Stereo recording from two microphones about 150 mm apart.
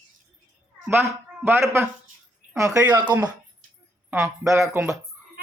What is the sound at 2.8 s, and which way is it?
Speech, 30° right (ahead or behind).